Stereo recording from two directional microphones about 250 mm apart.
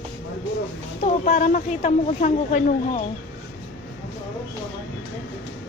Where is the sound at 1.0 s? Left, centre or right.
Left.